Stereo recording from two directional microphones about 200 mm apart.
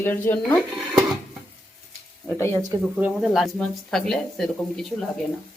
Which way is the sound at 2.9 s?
5° right (ahead or behind).